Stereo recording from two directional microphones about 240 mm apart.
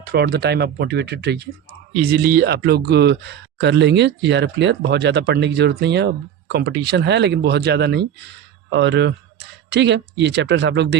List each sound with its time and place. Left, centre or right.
0.0 s speech: right